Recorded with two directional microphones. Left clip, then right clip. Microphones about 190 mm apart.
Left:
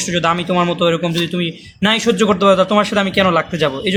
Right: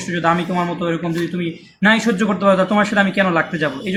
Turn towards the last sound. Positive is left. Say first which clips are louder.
# left 3 dB
turn(degrees=45)  # may be behind; listen again after turning